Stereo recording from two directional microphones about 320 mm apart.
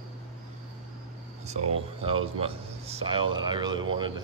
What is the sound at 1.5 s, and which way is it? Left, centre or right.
A man's voice, right.